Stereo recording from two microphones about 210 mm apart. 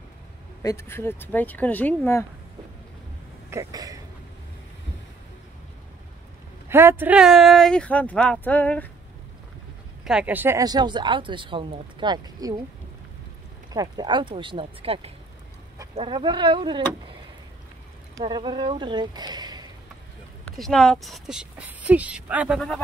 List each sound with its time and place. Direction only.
0.6 s speech: 10° left (ahead or behind)
3.4 s speech: 15° right (ahead or behind)
6.7 s speech: 10° right (ahead or behind); by 8.9 s 5° left (ahead or behind)
10.0 s speech: 5° right (ahead or behind)
13.7 s speech: 20° right (ahead or behind)
18.1 s speech: 20° right (ahead or behind)
20.5 s speech: centre (ahead or behind)